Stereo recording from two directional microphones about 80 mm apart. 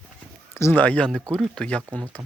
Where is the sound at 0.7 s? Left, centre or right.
Centre.